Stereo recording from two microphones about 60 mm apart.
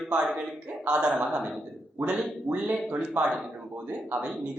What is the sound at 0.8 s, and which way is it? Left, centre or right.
A man's voice, centre.